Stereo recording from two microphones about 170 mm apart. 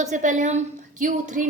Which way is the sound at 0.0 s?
45° right (ahead or behind).